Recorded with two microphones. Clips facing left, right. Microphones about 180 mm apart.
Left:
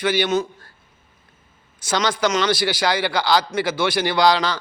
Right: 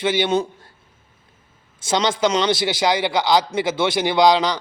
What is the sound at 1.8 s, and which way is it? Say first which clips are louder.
A man's voice: right 2 dB; 25° right (ahead or behind).